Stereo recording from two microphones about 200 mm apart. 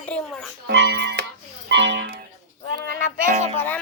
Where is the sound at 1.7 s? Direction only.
65° right (ahead or behind).